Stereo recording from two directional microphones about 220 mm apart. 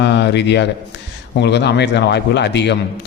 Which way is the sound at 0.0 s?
50° left (ahead or behind).